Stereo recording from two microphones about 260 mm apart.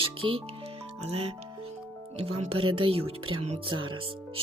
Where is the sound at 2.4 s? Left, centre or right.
Right.